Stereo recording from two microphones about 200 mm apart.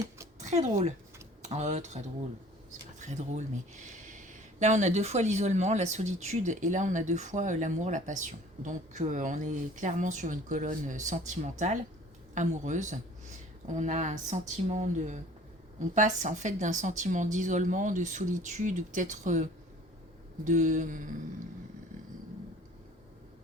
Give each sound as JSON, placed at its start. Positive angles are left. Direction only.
{"t": 0.3, "sound": "speech", "side_deg": -35}